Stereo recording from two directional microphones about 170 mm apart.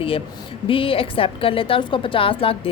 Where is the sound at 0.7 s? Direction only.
30° left (ahead or behind).